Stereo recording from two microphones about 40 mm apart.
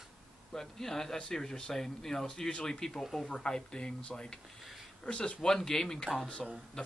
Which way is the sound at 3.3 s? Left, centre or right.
Centre.